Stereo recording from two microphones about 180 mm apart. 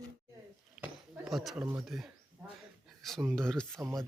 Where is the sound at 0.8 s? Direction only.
Centre (ahead or behind).